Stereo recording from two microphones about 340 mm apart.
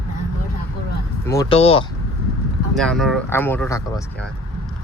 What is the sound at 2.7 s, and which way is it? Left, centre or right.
Speech, centre.